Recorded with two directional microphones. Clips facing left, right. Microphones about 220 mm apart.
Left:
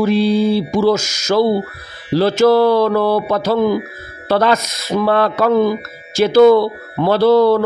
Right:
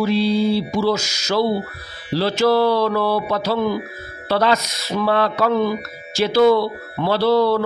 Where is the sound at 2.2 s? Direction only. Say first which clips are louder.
Left 5 dB; 50° left (ahead or behind).